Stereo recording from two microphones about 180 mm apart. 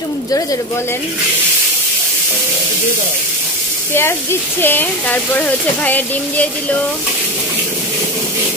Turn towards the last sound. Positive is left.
turn(degrees=10)  # may be behind; listen again after turning